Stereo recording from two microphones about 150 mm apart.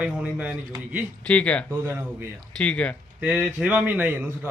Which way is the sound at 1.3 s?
10° left (ahead or behind).